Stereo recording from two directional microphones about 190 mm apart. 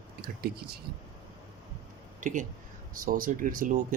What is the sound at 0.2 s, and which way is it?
Speech, 55° right (ahead or behind).